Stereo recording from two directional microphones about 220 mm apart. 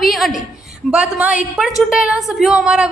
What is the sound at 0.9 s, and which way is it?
A woman's voice, 5° right (ahead or behind).